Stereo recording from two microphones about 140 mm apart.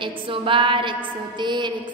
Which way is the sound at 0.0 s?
35° right (ahead or behind).